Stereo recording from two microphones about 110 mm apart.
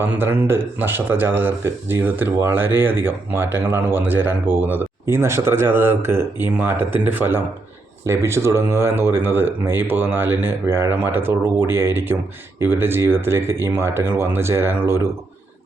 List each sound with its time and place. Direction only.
0.0 s speech: 20° right (ahead or behind)